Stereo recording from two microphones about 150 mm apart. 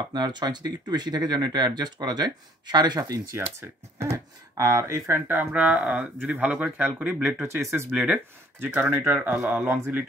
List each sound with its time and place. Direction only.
0.1 s speech: 30° right (ahead or behind); by 10.0 s 15° right (ahead or behind)